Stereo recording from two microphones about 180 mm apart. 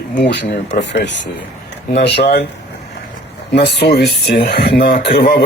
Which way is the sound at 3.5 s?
65° left (ahead or behind).